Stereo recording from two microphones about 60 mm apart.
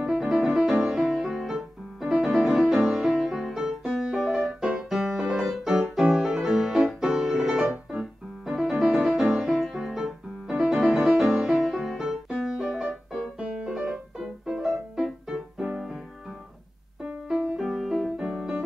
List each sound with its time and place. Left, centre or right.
0.0 s music: centre
7.9 s piano: centre
8.9 s music: centre
13.4 s music: centre
13.7 s music: centre
17.0 s music: right
17.6 s music: centre
18.3 s piano: centre